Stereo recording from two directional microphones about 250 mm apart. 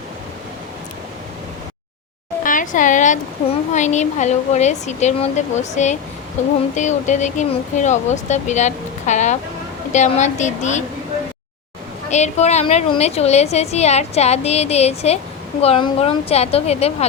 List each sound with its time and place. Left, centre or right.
2.4 s a woman's voice: left
12.1 s a woman's voice: left